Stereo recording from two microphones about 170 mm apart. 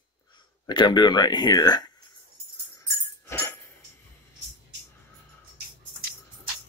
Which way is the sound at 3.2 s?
15° left (ahead or behind).